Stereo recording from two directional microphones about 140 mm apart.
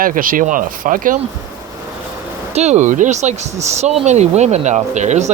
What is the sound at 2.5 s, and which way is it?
Speech, 55° right (ahead or behind).